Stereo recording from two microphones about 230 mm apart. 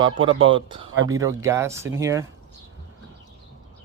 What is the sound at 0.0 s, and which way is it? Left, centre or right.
Speech, right.